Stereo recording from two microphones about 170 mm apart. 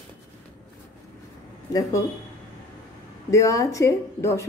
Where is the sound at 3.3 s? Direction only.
20° left (ahead or behind).